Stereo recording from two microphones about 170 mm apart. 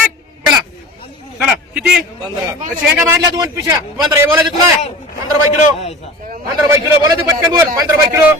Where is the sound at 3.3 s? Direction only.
20° right (ahead or behind).